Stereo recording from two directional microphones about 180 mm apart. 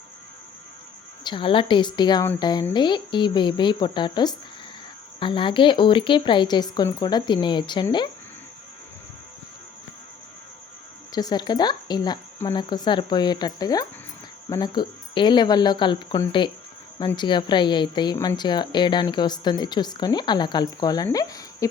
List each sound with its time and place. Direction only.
1.2 s speech: 25° left (ahead or behind)
11.1 s speech: 20° left (ahead or behind)